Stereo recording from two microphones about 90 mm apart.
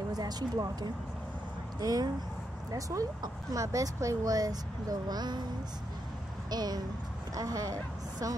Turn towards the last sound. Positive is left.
turn(degrees=-40)  # may be behind; listen again after turning